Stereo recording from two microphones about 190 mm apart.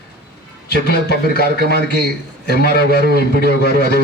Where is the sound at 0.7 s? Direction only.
55° left (ahead or behind).